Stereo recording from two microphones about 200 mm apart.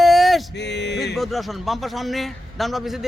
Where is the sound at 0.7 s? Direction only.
60° left (ahead or behind).